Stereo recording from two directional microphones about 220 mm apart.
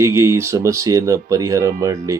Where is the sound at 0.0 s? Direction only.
15° right (ahead or behind).